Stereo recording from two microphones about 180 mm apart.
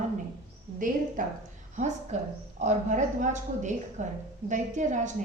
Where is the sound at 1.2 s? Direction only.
50° right (ahead or behind).